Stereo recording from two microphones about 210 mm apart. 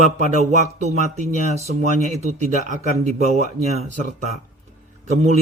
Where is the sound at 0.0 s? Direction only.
35° right (ahead or behind).